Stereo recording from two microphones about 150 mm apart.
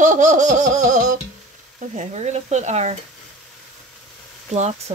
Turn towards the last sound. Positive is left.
turn(degrees=-45)  # may be behind; listen again after turning